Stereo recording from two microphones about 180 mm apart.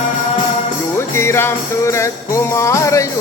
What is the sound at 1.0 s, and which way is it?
Music, 15° left (ahead or behind).